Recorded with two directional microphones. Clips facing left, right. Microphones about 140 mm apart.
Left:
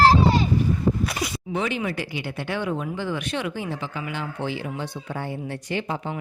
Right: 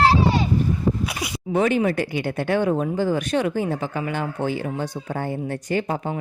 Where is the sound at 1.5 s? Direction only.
50° right (ahead or behind).